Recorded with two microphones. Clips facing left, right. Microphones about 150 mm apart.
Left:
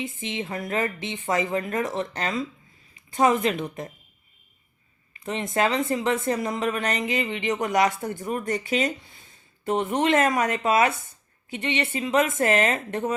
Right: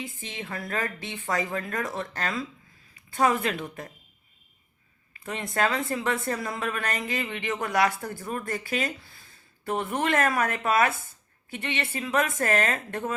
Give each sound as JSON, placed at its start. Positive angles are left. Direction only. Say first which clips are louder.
{"t": 0.0, "sound": "a woman's voice", "louder": "left 6 dB", "side_deg": 20}
{"t": 5.2, "sound": "a woman's voice", "louder": "left 3 dB", "side_deg": 20}